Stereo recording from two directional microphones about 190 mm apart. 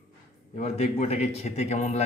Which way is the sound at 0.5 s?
35° left (ahead or behind).